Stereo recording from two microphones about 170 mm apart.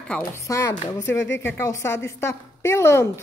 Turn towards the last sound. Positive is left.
turn(degrees=15)  # may be behind; listen again after turning